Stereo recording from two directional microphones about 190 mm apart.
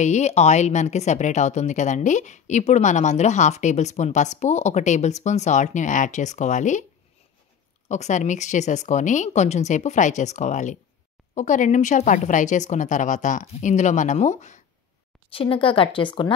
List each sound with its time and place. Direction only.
0.0 s speech: 35° left (ahead or behind)
7.9 s a woman's voice: 35° left (ahead or behind)